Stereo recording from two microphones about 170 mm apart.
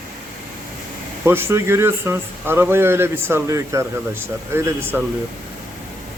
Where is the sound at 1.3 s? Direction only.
15° right (ahead or behind).